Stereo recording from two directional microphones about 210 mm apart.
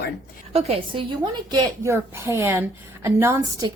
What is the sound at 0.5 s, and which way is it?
Speech, 30° right (ahead or behind).